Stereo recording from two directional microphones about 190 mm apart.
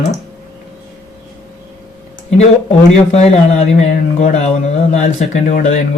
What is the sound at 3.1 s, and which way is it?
Speech, 35° left (ahead or behind).